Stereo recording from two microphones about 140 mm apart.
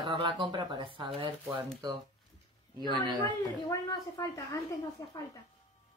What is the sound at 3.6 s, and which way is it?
A woman's voice, 25° left (ahead or behind).